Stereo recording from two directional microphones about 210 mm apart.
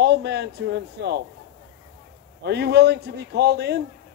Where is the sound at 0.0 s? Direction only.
50° right (ahead or behind).